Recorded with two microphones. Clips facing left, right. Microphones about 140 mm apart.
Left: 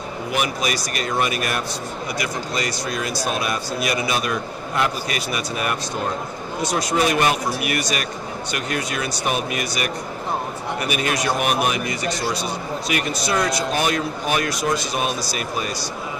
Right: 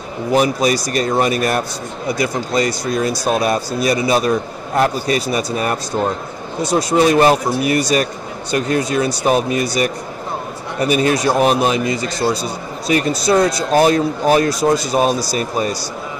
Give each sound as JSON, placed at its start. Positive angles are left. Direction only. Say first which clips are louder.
{"t": 0.3, "sound": "speech", "louder": "right 9 dB", "side_deg": -35}